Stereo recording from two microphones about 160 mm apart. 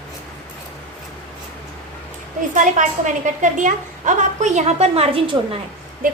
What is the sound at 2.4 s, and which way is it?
A woman's voice, 50° right (ahead or behind).